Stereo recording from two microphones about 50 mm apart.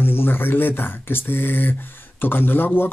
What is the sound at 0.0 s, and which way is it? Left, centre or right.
Speech, left.